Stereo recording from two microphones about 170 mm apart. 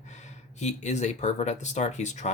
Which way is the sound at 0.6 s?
45° left (ahead or behind).